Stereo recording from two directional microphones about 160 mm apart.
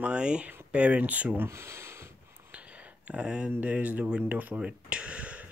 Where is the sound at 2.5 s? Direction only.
10° right (ahead or behind).